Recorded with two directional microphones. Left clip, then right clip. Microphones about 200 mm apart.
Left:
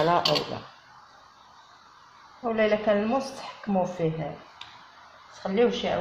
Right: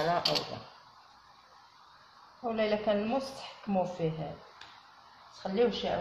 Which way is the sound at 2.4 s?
20° left (ahead or behind).